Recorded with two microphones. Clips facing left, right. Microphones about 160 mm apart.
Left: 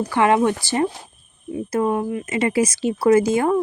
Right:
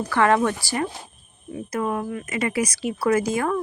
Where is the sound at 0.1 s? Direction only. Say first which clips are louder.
Left 2 dB; 15° left (ahead or behind).